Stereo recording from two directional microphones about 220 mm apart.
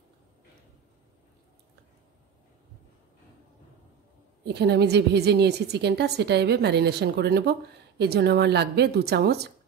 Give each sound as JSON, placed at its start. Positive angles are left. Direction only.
{"t": 4.6, "sound": "a woman's voice", "side_deg": -50}